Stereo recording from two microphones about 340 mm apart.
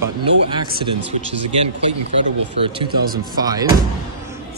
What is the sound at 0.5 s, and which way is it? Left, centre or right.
Speech, centre.